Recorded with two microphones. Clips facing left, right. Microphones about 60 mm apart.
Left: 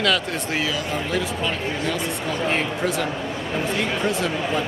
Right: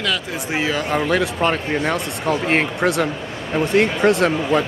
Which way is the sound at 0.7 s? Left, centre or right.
Right.